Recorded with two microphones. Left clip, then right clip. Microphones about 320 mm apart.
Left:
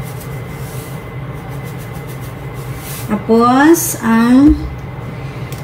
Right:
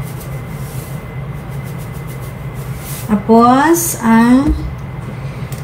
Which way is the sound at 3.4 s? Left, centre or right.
Centre.